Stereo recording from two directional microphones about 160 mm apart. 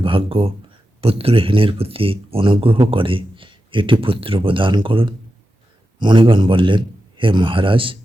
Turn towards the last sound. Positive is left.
turn(degrees=-35)  # may be behind; listen again after turning